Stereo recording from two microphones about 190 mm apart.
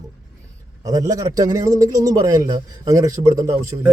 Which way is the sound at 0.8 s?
20° right (ahead or behind).